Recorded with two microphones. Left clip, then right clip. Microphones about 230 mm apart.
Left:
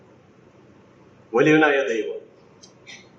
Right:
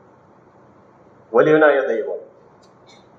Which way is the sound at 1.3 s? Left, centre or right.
Left.